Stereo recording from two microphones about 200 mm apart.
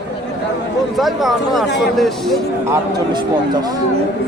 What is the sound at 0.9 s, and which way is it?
Speech, centre (ahead or behind).